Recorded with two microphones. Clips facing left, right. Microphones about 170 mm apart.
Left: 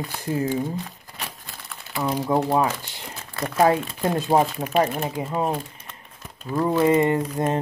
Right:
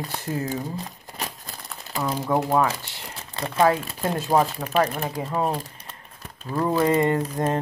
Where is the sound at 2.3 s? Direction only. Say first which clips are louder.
Left 1 dB; 20° left (ahead or behind).